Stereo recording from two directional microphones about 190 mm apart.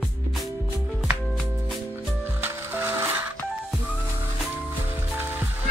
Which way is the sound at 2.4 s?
10° right (ahead or behind).